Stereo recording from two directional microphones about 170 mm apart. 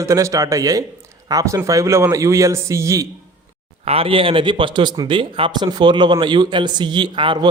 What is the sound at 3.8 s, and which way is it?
Speech, 35° right (ahead or behind).